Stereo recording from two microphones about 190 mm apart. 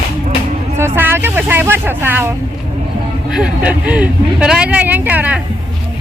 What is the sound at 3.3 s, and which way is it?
Speech, 5° right (ahead or behind).